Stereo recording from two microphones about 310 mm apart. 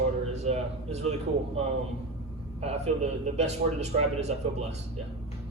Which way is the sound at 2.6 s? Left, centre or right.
Right.